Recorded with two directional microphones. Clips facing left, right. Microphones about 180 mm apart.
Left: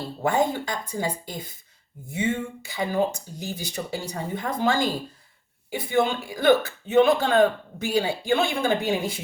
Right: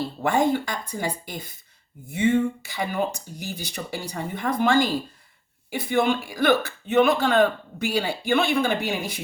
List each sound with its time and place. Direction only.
0.2 s speech: 25° left (ahead or behind)